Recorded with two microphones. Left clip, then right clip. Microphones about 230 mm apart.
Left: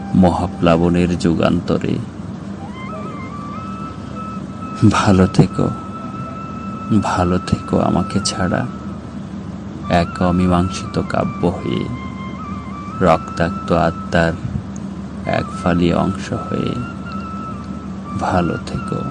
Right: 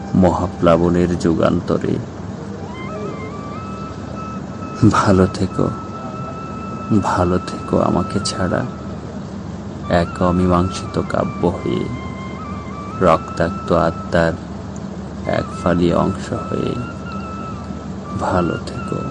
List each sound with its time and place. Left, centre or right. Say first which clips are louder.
0.2 s speech: even; centre
4.8 s speech: right 1 dB; centre
7.0 s speech: right 1 dB; centre
9.9 s speech: even; centre
13.0 s speech: even; centre
18.2 s speech: left 1 dB; centre